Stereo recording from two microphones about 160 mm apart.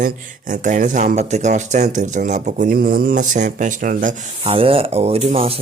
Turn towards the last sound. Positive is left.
turn(degrees=-35)  # may be behind; listen again after turning